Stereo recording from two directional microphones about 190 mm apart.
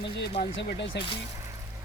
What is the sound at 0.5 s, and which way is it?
Speech, 70° left (ahead or behind).